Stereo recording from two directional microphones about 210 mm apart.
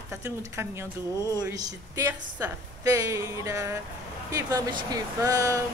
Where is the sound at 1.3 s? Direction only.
15° right (ahead or behind).